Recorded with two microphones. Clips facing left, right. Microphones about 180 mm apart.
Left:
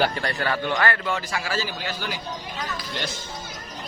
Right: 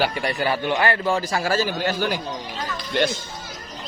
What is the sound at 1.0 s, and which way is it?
A man's voice, 35° right (ahead or behind).